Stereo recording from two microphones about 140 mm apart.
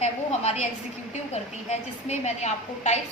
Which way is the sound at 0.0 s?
50° left (ahead or behind).